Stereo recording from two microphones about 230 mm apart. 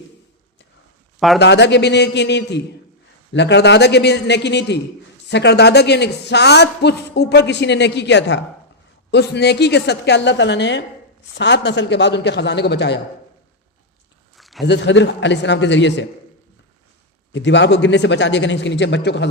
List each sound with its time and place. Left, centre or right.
1.4 s a man's voice: left
14.3 s a sound: centre
14.6 s a man's voice: left
17.3 s a man's voice: left